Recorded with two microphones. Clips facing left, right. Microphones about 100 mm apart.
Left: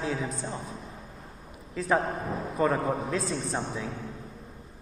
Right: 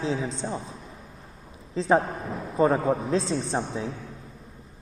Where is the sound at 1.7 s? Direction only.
25° right (ahead or behind).